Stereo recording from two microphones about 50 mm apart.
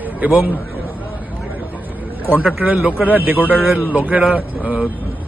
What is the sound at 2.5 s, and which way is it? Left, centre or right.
Speech, right.